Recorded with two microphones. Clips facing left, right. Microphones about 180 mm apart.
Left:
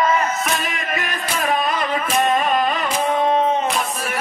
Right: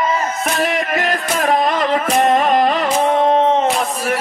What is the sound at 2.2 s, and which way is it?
Carnatic music, 70° right (ahead or behind).